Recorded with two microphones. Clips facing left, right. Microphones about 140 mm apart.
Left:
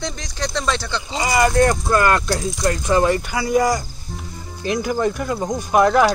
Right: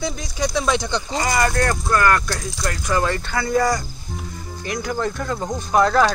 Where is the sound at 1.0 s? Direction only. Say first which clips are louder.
Left 6 dB; 10° left (ahead or behind).